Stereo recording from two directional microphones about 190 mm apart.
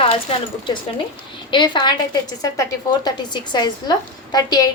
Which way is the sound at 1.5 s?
25° left (ahead or behind).